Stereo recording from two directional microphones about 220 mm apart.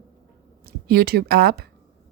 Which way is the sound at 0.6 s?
45° right (ahead or behind).